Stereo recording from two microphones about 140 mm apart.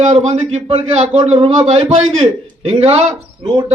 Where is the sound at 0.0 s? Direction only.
55° right (ahead or behind).